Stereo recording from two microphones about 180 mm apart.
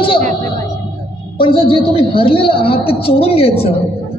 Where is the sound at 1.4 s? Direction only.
30° left (ahead or behind).